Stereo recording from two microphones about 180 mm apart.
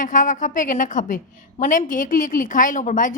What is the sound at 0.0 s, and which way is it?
A woman's voice, 45° left (ahead or behind).